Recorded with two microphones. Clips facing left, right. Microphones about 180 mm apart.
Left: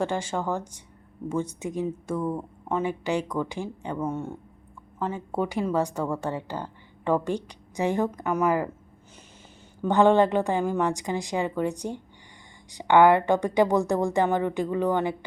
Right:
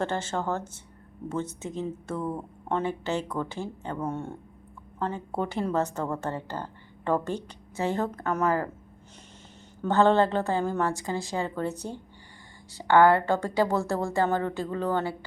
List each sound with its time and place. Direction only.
0.0 s a woman's voice: 10° left (ahead or behind)
2.1 s a woman's voice: centre (ahead or behind)
9.8 s a woman's voice: 15° left (ahead or behind)